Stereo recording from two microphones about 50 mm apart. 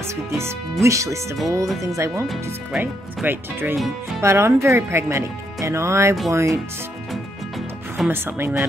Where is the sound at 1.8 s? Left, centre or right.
Right.